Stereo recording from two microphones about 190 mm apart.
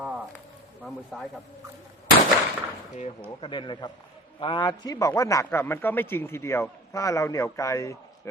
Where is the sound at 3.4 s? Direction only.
25° left (ahead or behind).